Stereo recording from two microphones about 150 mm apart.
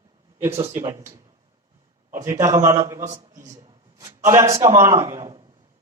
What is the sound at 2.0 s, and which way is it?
Speech, 60° right (ahead or behind).